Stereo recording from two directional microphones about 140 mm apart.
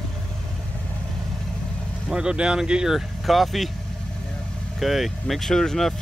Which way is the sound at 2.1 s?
5° right (ahead or behind).